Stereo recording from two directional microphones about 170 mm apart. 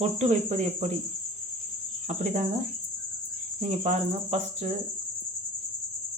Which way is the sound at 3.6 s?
45° right (ahead or behind).